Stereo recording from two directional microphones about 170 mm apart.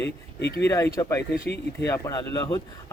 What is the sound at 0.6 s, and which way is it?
A man's voice, 15° left (ahead or behind).